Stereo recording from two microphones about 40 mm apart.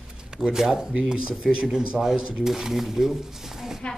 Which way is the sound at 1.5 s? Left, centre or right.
Centre.